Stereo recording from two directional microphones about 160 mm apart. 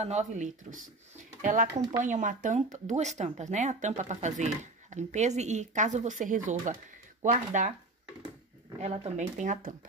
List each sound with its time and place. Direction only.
0.0 s speech: 45° right (ahead or behind)
8.7 s speech: 40° right (ahead or behind)